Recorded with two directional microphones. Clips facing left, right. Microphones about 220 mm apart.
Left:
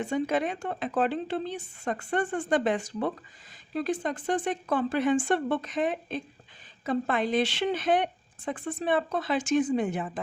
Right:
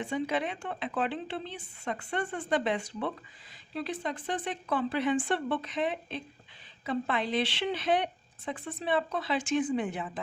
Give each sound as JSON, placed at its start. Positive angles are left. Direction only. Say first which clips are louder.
{"t": 0.0, "sound": "a woman's voice", "louder": "left 4 dB", "side_deg": 45}